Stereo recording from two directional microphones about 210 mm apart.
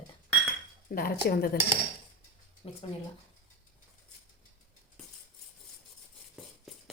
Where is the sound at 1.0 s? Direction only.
45° left (ahead or behind).